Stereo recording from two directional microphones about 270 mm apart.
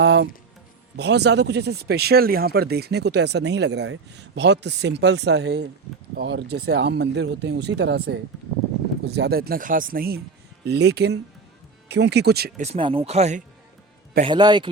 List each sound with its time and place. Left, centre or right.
0.0 s speech: right
12.6 s a man's voice: right